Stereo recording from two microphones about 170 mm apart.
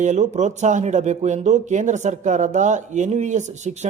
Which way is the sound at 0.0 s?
45° right (ahead or behind).